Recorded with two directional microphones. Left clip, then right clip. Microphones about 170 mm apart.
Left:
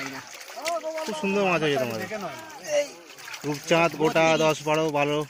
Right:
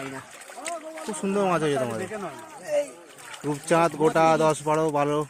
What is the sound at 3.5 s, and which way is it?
Speech, 5° right (ahead or behind).